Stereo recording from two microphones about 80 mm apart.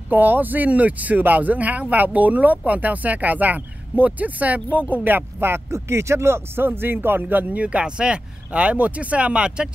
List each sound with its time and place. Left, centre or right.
0.1 s speech: right